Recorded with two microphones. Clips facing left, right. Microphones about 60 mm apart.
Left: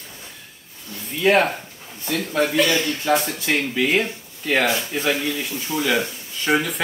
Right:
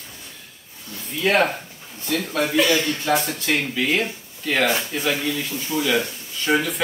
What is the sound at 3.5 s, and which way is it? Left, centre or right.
Speech, centre.